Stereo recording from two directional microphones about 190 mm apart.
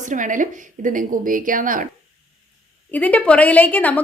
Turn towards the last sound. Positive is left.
turn(degrees=10)  # may be behind; listen again after turning